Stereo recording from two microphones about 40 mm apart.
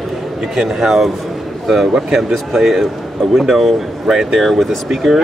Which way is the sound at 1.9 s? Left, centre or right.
Centre.